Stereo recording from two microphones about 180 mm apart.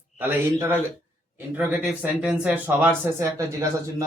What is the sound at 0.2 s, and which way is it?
Speech, 10° right (ahead or behind).